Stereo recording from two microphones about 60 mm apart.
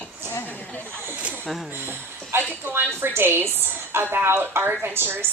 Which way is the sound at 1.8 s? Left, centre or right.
Right.